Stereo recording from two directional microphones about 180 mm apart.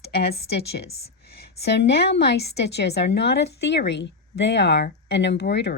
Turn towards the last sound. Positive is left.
turn(degrees=70)  # may be behind; listen again after turning